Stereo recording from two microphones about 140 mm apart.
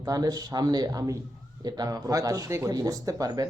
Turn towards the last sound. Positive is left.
turn(degrees=-25)  # may be behind; listen again after turning